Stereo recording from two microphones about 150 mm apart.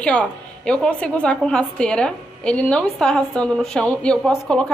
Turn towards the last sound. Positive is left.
turn(degrees=5)  # may be behind; listen again after turning